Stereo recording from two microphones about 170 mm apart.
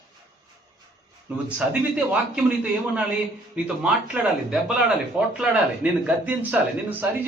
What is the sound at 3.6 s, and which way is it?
A man's voice, 5° right (ahead or behind).